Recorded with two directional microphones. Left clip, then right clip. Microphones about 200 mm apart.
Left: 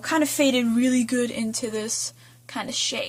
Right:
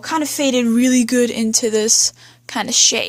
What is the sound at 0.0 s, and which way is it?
Speech, 30° right (ahead or behind).